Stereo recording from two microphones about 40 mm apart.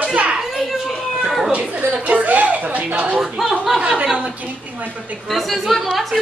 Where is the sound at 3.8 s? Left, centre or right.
Right.